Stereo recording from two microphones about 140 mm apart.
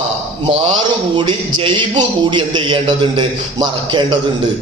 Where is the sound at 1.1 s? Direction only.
35° right (ahead or behind).